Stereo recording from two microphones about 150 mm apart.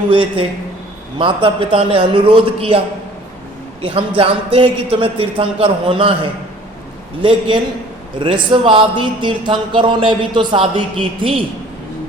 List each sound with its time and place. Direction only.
0.1 s a man's voice: 35° right (ahead or behind)
7.2 s a man's voice: 35° right (ahead or behind)